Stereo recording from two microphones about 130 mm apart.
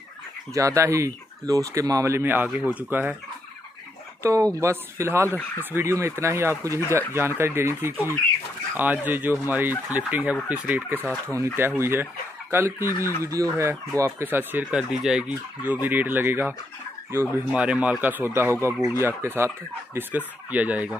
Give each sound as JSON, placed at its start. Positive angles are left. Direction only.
{"t": 0.6, "sound": "speech", "side_deg": -25}
{"t": 4.2, "sound": "speech", "side_deg": -25}